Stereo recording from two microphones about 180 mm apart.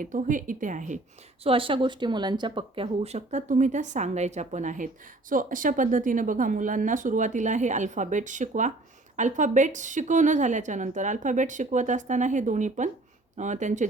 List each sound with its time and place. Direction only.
0.0 s a woman's voice: 45° right (ahead or behind)
1.5 s a woman's voice: 30° right (ahead or behind)